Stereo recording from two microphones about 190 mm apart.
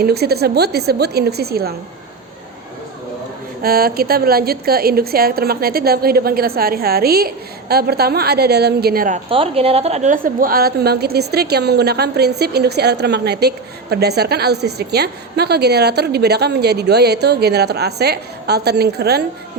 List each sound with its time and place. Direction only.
0.0 s a woman's voice: 55° right (ahead or behind)
3.6 s a woman's voice: 50° right (ahead or behind)
9.3 s a woman's voice: 30° right (ahead or behind); by 19.2 s 60° right (ahead or behind)